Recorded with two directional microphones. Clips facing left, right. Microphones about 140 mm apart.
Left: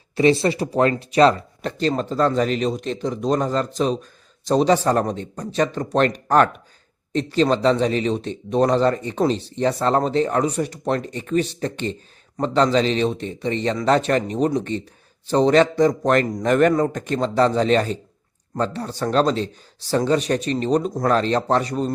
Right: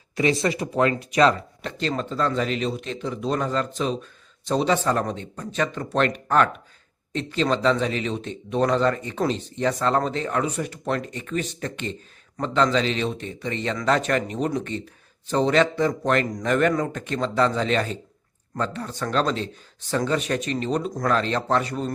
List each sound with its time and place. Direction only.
0.2 s speech: 30° left (ahead or behind)